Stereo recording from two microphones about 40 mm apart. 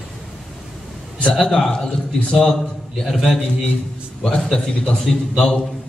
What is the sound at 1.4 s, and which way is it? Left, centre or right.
Speech, centre.